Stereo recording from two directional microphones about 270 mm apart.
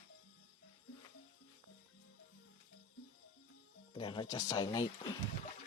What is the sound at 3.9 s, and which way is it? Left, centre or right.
Speech, centre.